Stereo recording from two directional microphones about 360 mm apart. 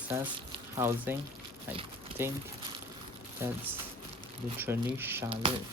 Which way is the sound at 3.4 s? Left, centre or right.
Centre.